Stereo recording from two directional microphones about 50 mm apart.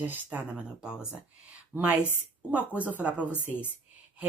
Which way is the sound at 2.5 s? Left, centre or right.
Right.